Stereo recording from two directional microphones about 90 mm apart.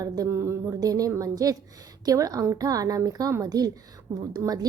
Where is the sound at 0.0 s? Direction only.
35° right (ahead or behind).